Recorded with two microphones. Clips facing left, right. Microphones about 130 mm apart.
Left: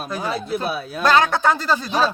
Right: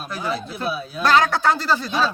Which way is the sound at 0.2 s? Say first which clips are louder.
Left 2 dB; 55° left (ahead or behind).